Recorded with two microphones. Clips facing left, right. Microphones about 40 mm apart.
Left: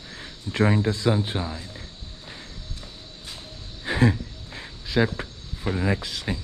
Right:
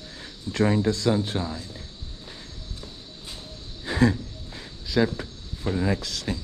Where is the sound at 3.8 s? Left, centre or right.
Left.